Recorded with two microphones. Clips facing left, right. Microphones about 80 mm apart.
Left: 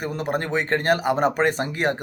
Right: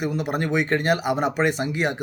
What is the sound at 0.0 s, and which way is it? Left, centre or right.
Speech, left.